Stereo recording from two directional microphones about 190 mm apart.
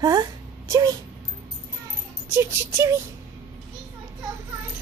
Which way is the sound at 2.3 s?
15° right (ahead or behind).